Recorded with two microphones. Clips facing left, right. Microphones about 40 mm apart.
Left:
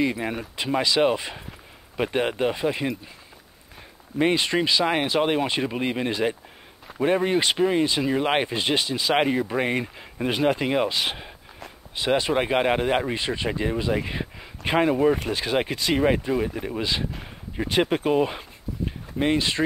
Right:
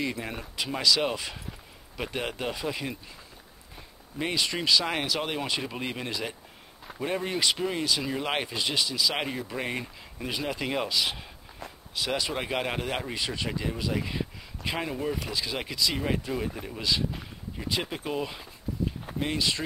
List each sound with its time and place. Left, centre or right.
0.0 s speech: centre
4.2 s speech: left
4.6 s speech: left
10.6 s speech: centre
10.9 s speech: left
16.3 s speech: centre
16.6 s speech: left
17.6 s speech: left
19.1 s speech: left